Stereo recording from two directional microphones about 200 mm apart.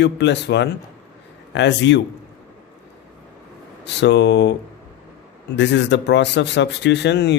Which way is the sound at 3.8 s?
60° left (ahead or behind).